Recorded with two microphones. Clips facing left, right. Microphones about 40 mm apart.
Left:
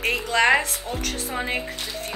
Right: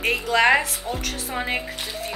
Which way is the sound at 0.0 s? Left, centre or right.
Centre.